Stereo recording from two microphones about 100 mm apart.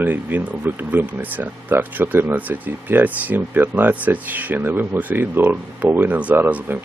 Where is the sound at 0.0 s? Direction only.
15° right (ahead or behind).